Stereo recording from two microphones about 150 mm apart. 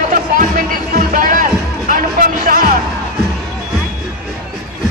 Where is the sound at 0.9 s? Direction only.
65° right (ahead or behind).